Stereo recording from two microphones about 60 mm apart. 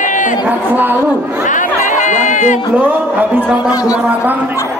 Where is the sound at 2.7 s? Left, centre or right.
Right.